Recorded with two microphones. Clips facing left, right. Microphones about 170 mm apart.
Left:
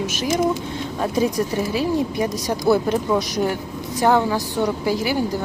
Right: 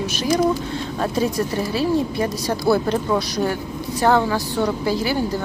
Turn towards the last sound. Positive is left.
turn(degrees=15)  # may be behind; listen again after turning